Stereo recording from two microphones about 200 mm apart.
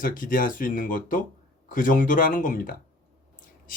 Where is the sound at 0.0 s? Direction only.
45° left (ahead or behind).